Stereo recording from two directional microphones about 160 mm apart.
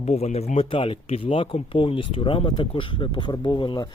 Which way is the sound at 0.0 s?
40° left (ahead or behind).